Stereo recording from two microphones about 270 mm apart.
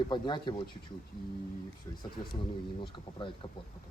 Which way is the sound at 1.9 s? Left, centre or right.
Centre.